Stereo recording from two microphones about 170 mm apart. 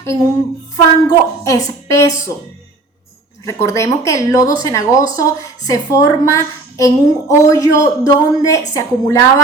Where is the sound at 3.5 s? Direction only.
15° left (ahead or behind).